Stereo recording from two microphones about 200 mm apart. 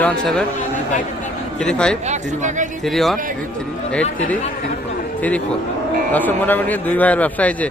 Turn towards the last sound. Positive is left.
turn(degrees=5)  # may be behind; listen again after turning